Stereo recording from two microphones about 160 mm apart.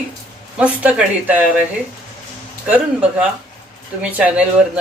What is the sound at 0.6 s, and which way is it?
Speech, 10° right (ahead or behind).